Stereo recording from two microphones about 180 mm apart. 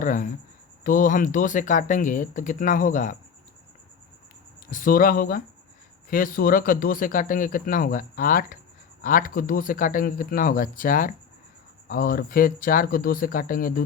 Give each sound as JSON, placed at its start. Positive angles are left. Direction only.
{"t": 0.0, "sound": "a man's voice", "side_deg": 45}
{"t": 4.7, "sound": "a man's voice", "side_deg": 50}